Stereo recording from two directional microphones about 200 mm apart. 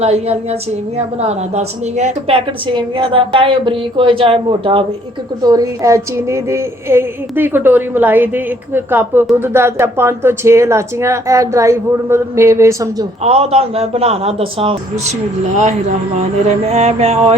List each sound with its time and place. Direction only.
0.0 s mantra: 30° right (ahead or behind)
0.9 s a woman's voice: 35° right (ahead or behind); by 13.1 s 15° right (ahead or behind)
13.2 s a woman's voice: 30° right (ahead or behind)
16.6 s mantra: 30° right (ahead or behind)